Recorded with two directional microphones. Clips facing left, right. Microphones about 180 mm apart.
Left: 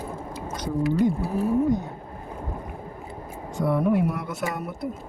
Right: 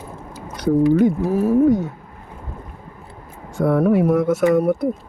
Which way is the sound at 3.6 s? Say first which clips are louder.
Right 6 dB; 85° right.